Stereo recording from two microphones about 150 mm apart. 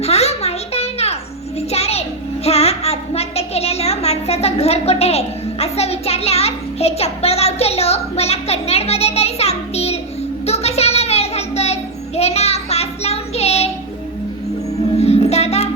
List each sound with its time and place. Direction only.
0.0 s a sound: 45° left (ahead or behind)
10.4 s child singing: 45° left (ahead or behind)
14.9 s child singing: 45° left (ahead or behind)